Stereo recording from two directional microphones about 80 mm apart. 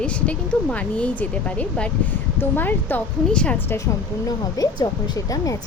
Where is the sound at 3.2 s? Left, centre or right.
Centre.